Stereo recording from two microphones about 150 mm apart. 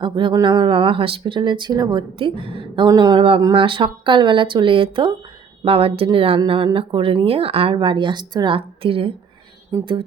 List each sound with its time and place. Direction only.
0.0 s speech: 35° right (ahead or behind)